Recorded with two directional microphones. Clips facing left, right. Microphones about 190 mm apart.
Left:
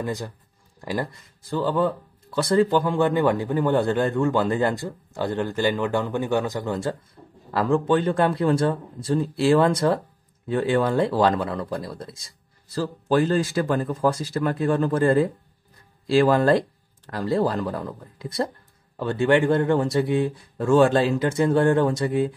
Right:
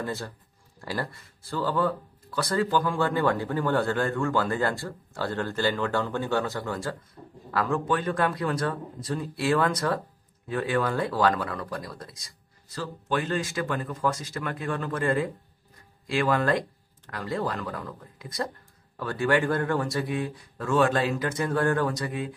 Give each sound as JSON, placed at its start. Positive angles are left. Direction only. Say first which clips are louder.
{"t": 0.0, "sound": "speech", "louder": "left 4 dB", "side_deg": 15}
{"t": 0.7, "sound": "a sound", "louder": "left 5 dB", "side_deg": 20}
{"t": 1.5, "sound": "speech", "louder": "left 4 dB", "side_deg": 20}